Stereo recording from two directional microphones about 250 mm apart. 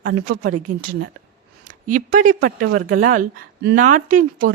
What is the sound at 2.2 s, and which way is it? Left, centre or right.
Speech, right.